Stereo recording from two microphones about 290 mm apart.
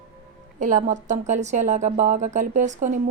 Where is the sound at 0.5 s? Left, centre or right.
Right.